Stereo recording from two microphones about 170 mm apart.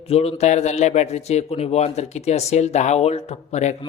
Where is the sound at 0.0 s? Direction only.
35° left (ahead or behind).